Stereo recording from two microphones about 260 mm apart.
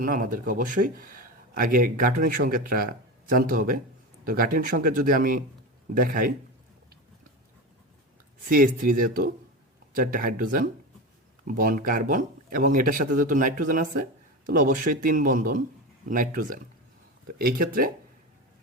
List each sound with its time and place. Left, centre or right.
0.0 s speech: right
8.4 s speech: right